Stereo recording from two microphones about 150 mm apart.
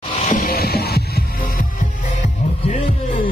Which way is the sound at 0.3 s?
80° left.